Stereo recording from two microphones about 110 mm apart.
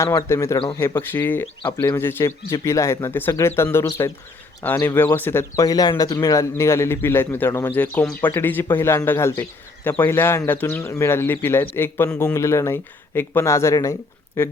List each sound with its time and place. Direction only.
0.3 s speech: 30° left (ahead or behind)